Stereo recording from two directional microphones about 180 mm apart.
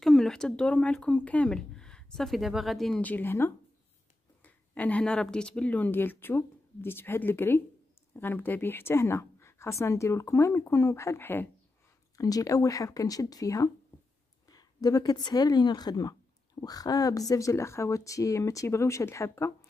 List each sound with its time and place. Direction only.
0.0 s speech: 5° left (ahead or behind)